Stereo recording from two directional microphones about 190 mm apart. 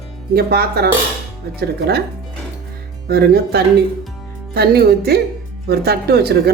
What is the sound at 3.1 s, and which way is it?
A woman's voice, 55° right (ahead or behind).